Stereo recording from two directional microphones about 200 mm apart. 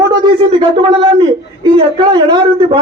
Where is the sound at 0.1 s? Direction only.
25° right (ahead or behind).